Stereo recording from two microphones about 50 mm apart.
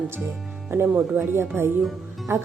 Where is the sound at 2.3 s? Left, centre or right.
Right.